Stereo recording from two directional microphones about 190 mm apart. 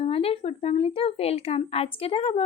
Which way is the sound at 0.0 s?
30° left (ahead or behind).